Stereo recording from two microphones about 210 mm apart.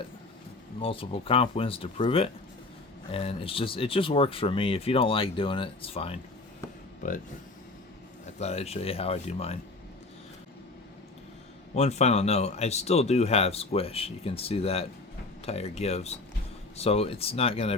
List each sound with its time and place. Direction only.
0.8 s speech: 25° left (ahead or behind)
8.4 s speech: 30° left (ahead or behind)
11.7 s speech: 30° left (ahead or behind)